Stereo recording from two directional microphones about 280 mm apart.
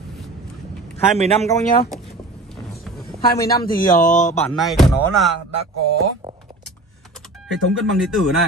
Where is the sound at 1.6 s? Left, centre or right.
Left.